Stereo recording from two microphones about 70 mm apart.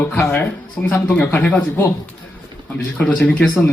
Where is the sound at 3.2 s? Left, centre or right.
Left.